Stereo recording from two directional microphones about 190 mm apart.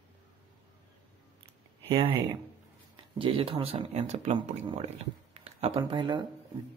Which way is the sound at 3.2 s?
30° right (ahead or behind).